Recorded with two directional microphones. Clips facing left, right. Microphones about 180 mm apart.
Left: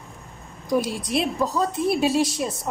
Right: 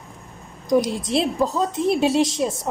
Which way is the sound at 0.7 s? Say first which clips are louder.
Right 4 dB; 20° right (ahead or behind).